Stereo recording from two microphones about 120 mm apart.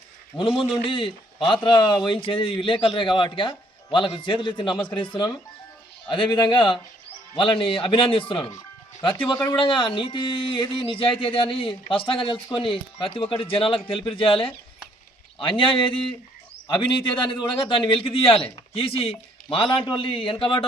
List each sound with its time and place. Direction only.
0.3 s a man's voice: 45° left (ahead or behind)